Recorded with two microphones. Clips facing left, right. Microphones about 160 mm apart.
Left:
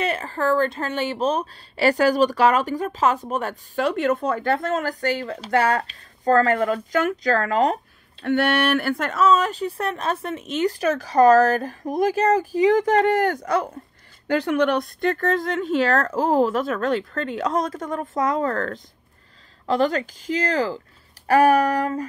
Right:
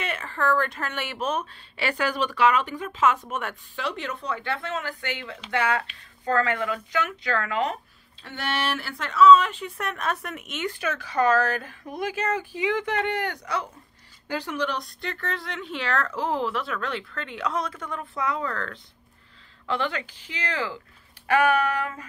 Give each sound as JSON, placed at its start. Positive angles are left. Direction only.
{"t": 0.0, "sound": "speech", "side_deg": 35}
{"t": 8.2, "sound": "speech", "side_deg": 60}
{"t": 14.2, "sound": "speech", "side_deg": 60}